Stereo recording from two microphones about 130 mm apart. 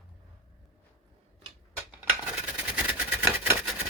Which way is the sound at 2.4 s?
10° right (ahead or behind).